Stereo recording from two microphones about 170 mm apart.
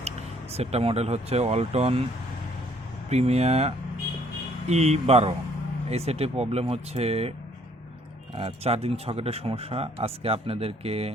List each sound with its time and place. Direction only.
0.0 s speech: 40° right (ahead or behind)
3.1 s speech: 40° right (ahead or behind)
8.4 s speech: 35° right (ahead or behind)